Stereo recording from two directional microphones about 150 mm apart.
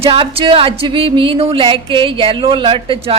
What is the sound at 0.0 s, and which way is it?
Speech, 40° right (ahead or behind).